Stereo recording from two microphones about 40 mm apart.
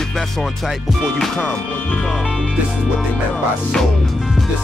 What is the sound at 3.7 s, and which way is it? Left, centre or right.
Speech, left.